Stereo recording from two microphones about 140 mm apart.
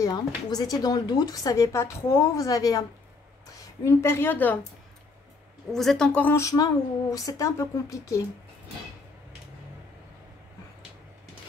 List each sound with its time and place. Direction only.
0.0 s a woman's voice: 30° left (ahead or behind)
5.7 s speech: 5° left (ahead or behind); by 8.2 s 25° left (ahead or behind)